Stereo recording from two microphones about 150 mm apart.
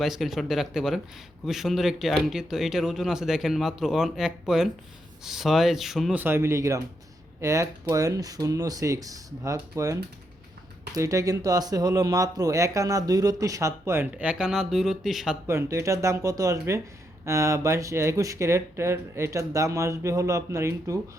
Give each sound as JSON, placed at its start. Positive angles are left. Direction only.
{"t": 0.0, "sound": "speech", "side_deg": 0}
{"t": 6.2, "sound": "speech", "side_deg": -15}
{"t": 15.4, "sound": "speech", "side_deg": -20}